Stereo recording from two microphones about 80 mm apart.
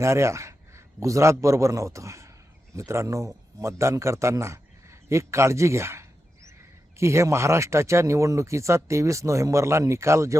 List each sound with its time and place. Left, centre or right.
0.0 s a man's voice: right